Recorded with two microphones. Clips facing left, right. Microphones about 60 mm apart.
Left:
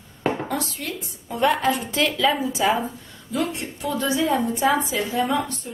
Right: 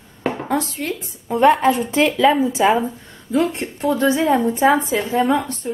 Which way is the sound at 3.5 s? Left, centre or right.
Right.